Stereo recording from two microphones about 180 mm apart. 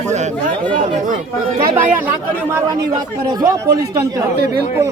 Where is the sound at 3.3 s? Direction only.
20° right (ahead or behind).